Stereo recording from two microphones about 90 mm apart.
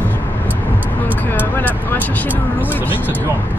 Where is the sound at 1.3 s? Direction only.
20° left (ahead or behind).